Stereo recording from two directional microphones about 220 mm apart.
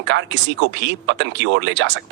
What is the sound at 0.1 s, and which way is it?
Speech, 55° right (ahead or behind).